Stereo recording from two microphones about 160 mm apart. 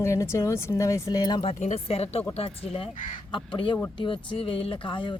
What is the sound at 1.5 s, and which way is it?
Speech, 45° left (ahead or behind).